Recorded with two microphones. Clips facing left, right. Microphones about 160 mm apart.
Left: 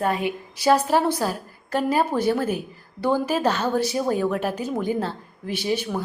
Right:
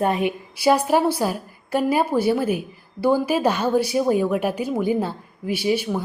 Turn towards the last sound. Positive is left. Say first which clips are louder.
# right 3 dB
turn(degrees=-10)  # may be behind; listen again after turning